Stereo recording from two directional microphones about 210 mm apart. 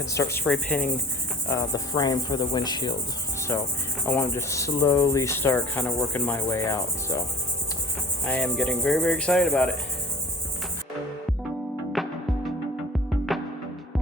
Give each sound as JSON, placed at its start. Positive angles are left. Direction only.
{"t": 0.0, "sound": "cricket", "side_deg": 15}
{"t": 8.2, "sound": "cricket", "side_deg": 5}
{"t": 11.9, "sound": "music", "side_deg": 0}